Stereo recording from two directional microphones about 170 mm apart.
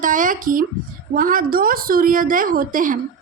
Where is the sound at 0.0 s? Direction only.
50° right (ahead or behind).